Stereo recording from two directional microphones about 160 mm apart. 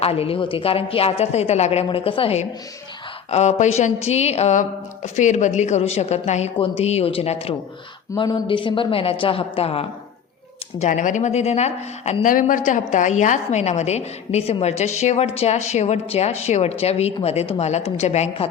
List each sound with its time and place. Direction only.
0.0 s a woman's voice: 40° left (ahead or behind)
10.8 s a woman's voice: 50° left (ahead or behind)